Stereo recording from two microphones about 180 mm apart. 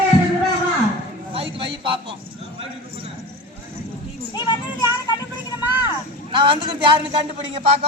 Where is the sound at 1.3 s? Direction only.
30° right (ahead or behind).